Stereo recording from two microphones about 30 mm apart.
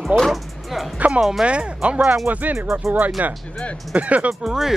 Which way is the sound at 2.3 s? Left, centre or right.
Right.